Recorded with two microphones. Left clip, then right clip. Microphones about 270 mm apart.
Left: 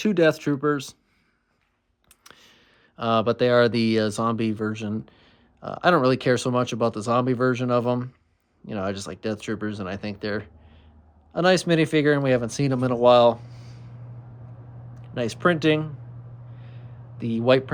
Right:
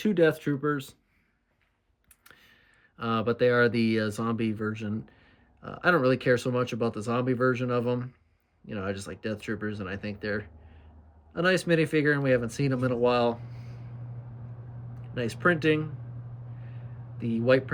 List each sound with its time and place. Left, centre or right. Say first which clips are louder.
0.0 s speech: left 4 dB; centre
2.2 s speech: left 5 dB; centre
15.0 s speech: left 3 dB; centre
17.2 s speech: left 4 dB; centre